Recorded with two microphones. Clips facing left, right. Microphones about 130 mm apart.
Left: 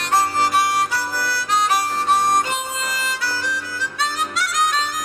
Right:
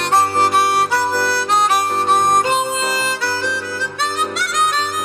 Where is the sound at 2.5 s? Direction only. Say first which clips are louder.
Right 7 dB; 65° right (ahead or behind).